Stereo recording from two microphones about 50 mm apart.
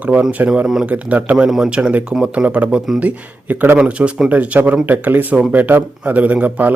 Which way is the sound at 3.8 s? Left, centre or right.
Right.